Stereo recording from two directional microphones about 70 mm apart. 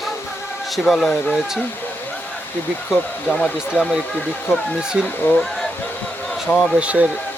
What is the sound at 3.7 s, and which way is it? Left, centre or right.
Speech, centre.